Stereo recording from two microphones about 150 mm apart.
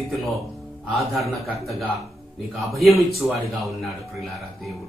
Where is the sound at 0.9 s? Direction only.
Centre (ahead or behind).